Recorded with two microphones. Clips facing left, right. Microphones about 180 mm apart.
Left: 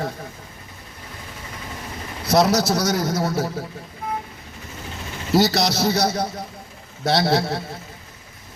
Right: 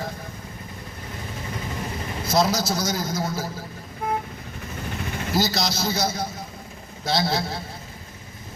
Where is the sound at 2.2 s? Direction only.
70° left (ahead or behind).